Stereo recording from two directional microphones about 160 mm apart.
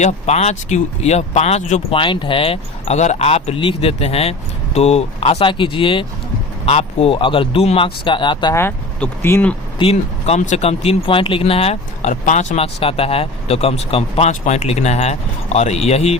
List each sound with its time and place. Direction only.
0.0 s speech: 45° left (ahead or behind)
2.0 s speech: 30° left (ahead or behind)
8.5 s speech: 15° left (ahead or behind)
9.7 s speech: 40° left (ahead or behind)